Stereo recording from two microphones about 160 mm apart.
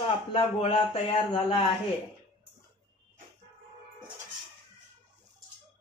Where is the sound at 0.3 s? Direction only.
35° left (ahead or behind).